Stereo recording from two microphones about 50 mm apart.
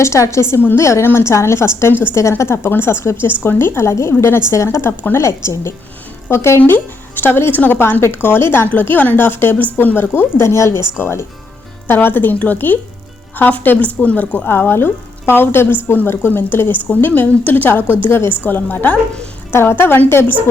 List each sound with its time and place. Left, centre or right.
0.0 s a woman's voice: left
2.4 s a woman's voice: left
6.7 s a woman's voice: left
8.6 s a woman's voice: left
10.4 s a woman's voice: left
10.9 s a woman's voice: left
14.4 s a woman's voice: left
19.5 s a woman's voice: left